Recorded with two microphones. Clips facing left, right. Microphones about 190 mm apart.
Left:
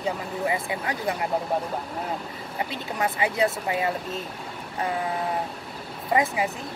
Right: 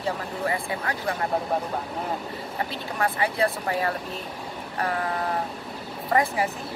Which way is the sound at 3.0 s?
20° left (ahead or behind).